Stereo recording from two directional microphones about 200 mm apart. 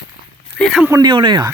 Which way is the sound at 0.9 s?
20° right (ahead or behind).